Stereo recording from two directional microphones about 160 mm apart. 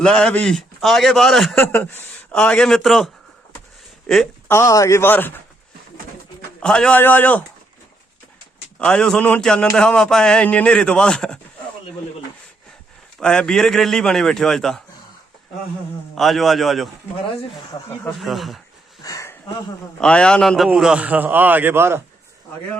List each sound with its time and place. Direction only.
0.0 s speech: 5° left (ahead or behind)
1.5 s speech: 15° left (ahead or behind)
6.6 s speech: 5° left (ahead or behind)
8.8 s speech: 5° left (ahead or behind)
13.1 s speech: 5° left (ahead or behind)
16.1 s speech: centre (ahead or behind)
17.7 s speech: 25° left (ahead or behind)
18.2 s speech: centre (ahead or behind)
19.0 s sniff: 20° left (ahead or behind)
20.0 s a man's voice: 5° left (ahead or behind); by 22.0 s 15° right (ahead or behind)